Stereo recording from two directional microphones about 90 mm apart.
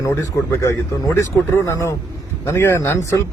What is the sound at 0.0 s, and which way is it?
A man's voice, 35° left (ahead or behind).